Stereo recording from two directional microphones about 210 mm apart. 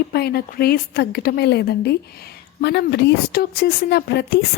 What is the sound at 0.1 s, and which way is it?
A woman's voice, 50° left (ahead or behind).